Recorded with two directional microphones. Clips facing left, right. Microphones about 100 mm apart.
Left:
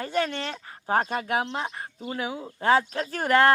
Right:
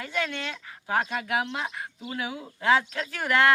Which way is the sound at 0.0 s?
40° left (ahead or behind).